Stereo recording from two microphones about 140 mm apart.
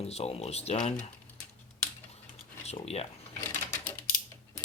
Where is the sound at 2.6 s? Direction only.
50° left (ahead or behind).